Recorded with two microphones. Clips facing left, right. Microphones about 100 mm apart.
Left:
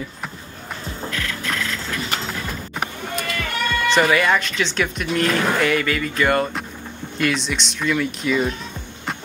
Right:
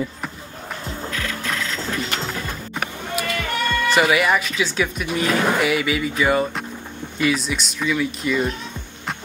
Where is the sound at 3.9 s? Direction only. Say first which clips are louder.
Left 1 dB; 5° right (ahead or behind).